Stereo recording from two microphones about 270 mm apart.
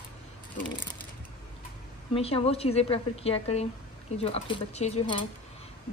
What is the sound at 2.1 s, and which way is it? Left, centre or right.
A woman's voice, left.